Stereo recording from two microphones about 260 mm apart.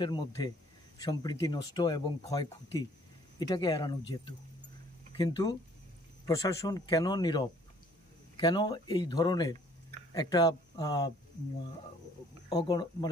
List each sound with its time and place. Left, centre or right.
0.0 s speech: centre
12.4 s speech: centre